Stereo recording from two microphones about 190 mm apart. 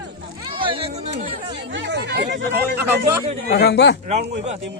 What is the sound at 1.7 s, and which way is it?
Speech, 65° right (ahead or behind).